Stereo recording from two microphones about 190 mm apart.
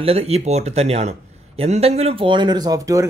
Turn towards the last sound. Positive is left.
turn(degrees=-20)  # may be behind; listen again after turning